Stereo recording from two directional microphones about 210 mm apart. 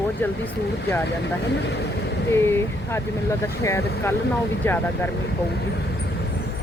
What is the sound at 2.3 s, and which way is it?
Speech, 10° left (ahead or behind).